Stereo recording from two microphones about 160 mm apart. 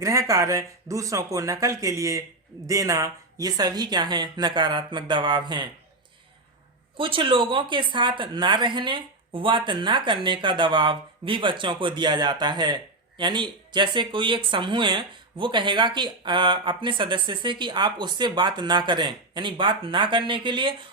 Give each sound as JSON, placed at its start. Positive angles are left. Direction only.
{"t": 0.0, "sound": "speech", "side_deg": -20}
{"t": 6.9, "sound": "speech", "side_deg": -30}